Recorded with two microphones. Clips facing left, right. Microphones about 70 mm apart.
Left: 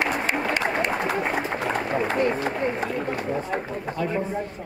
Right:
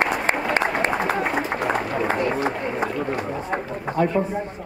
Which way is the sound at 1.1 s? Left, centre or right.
Centre.